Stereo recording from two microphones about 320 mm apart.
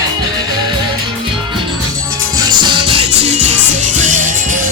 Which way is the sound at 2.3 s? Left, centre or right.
Centre.